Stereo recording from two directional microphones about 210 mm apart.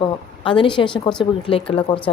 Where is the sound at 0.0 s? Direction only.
25° left (ahead or behind).